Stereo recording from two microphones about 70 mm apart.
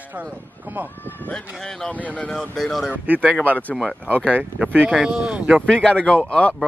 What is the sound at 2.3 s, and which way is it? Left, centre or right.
Speech, centre.